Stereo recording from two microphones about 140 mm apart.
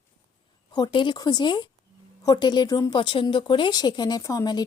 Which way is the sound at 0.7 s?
30° left (ahead or behind).